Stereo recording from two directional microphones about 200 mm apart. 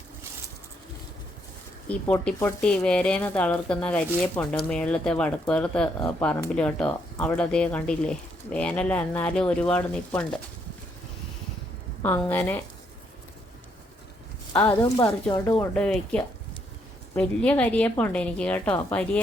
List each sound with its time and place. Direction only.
1.9 s speech: 5° left (ahead or behind)
12.0 s speech: 10° left (ahead or behind)
15.3 s speech: 15° left (ahead or behind)
15.7 s speech: 5° left (ahead or behind)